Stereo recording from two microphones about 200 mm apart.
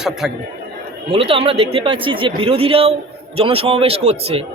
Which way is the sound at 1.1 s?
30° right (ahead or behind).